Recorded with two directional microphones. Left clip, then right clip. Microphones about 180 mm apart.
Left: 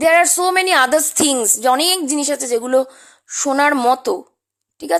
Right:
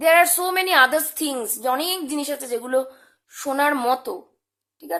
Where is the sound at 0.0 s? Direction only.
30° left (ahead or behind).